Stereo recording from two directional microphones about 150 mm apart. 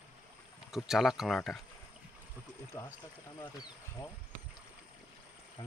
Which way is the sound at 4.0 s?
15° left (ahead or behind).